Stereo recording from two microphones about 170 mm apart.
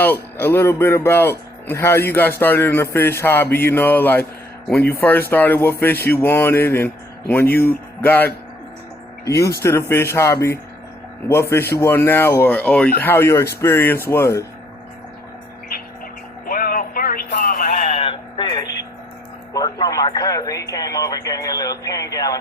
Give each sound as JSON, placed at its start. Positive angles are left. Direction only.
{"t": 0.0, "sound": "speech", "side_deg": 10}
{"t": 9.4, "sound": "speech", "side_deg": 65}
{"t": 9.9, "sound": "speech", "side_deg": 15}
{"t": 16.5, "sound": "music", "side_deg": 60}
{"t": 17.8, "sound": "a sound", "side_deg": 35}
{"t": 19.5, "sound": "radio", "side_deg": 20}